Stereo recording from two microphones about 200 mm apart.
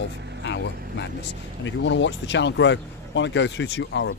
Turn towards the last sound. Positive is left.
turn(degrees=60)  # may be behind; listen again after turning